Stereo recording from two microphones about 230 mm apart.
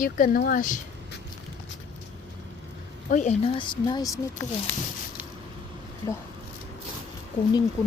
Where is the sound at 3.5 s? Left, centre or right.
Left.